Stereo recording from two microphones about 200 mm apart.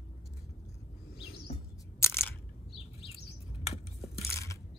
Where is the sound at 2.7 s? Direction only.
25° left (ahead or behind).